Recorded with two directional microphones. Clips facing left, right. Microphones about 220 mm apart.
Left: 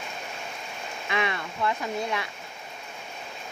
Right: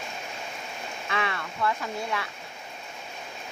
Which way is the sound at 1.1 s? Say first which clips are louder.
Left 2 dB; 15° left (ahead or behind).